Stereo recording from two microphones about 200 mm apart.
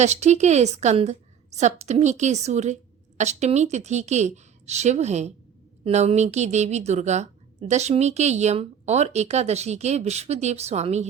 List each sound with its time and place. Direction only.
0.0 s a woman's voice: 35° right (ahead or behind)